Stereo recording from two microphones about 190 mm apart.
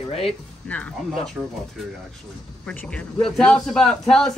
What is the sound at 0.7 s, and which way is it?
A man's voice, 5° left (ahead or behind).